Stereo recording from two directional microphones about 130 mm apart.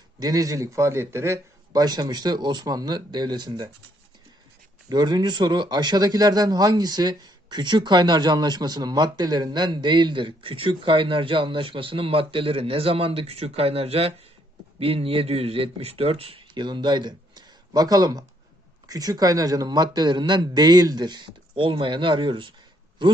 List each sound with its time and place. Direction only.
0.2 s a man's voice: 30° right (ahead or behind)
4.8 s a man's voice: 30° right (ahead or behind)